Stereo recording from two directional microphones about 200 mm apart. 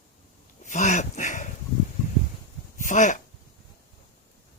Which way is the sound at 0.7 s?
40° left (ahead or behind).